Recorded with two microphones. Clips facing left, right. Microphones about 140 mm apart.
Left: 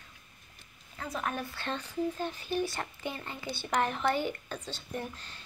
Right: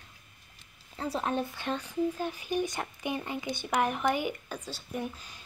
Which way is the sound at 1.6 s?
10° right (ahead or behind).